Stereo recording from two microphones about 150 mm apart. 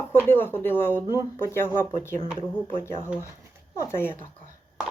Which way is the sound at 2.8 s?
15° left (ahead or behind).